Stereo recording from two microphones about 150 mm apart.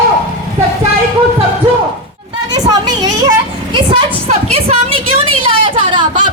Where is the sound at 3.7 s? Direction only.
35° right (ahead or behind).